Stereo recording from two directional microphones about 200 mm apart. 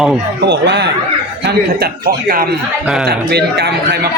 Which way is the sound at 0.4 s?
60° right (ahead or behind).